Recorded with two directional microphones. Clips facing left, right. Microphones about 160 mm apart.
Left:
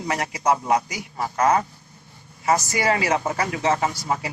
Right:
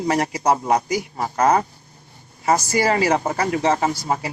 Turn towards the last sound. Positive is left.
turn(degrees=-35)  # may be behind; listen again after turning